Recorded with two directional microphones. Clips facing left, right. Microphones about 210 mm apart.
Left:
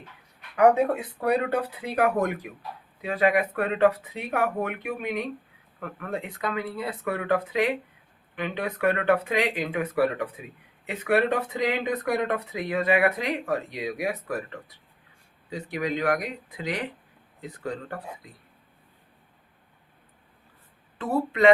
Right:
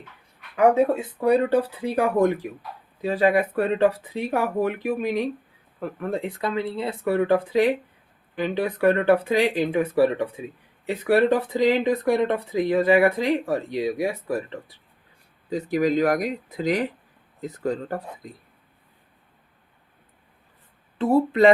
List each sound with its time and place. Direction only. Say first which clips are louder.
0.5 s speech: right 2 dB; 25° right (ahead or behind)
15.4 s speech: right 8 dB; 40° right (ahead or behind)
21.0 s speech: right 4 dB; 30° right (ahead or behind)